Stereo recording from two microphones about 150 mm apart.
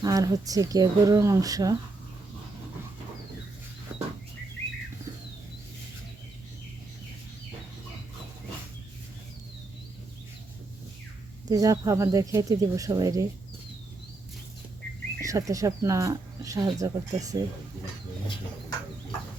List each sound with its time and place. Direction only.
0.0 s speech: 25° right (ahead or behind)
3.9 s a sound: 5° right (ahead or behind)
11.4 s speech: 25° right (ahead or behind)
15.2 s speech: 20° right (ahead or behind)